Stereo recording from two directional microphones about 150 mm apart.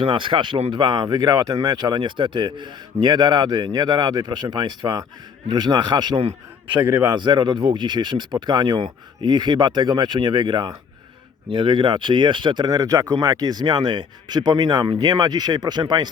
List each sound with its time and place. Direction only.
0.0 s speech: 35° right (ahead or behind)
6.7 s a man's voice: 15° right (ahead or behind)
7.0 s speech: 30° right (ahead or behind)